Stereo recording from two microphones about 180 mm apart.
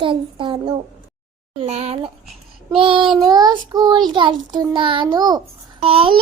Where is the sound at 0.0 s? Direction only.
30° right (ahead or behind).